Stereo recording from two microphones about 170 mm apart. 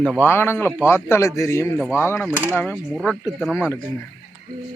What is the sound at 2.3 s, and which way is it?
Speech, 10° right (ahead or behind).